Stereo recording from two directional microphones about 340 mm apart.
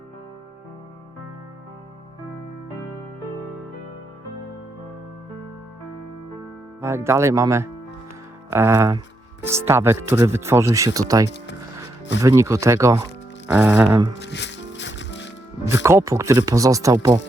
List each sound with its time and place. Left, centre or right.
6.8 s speech: centre
14.2 s music: left
15.6 s speech: centre